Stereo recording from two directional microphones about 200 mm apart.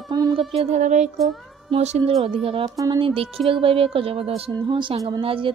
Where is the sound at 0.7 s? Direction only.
35° right (ahead or behind).